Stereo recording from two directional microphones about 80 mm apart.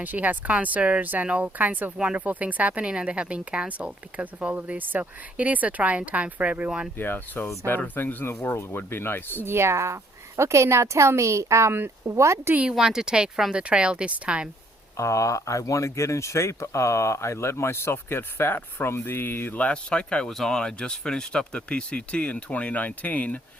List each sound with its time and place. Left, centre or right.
0.0 s speech: right
6.9 s speech: left
9.4 s a woman's voice: right
12.7 s speech: centre
14.9 s speech: left; by 23.4 s centre